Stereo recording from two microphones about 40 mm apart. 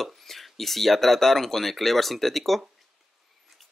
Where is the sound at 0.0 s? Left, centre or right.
Centre.